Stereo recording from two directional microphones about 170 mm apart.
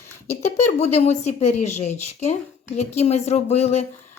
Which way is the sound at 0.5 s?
40° left (ahead or behind).